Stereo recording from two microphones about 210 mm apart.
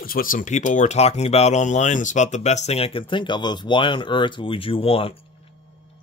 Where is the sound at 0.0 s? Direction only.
40° left (ahead or behind); by 5.1 s 25° left (ahead or behind).